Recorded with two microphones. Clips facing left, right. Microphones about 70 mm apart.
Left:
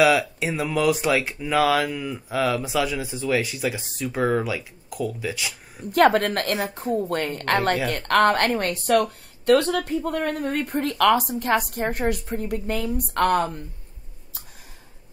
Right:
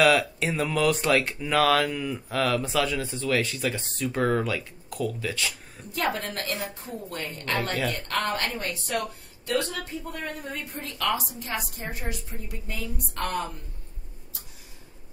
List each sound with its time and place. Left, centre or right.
0.0 s speech: centre
5.9 s speech: left